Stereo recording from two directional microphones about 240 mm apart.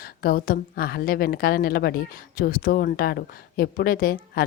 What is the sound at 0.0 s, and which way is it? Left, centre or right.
A woman's voice, left.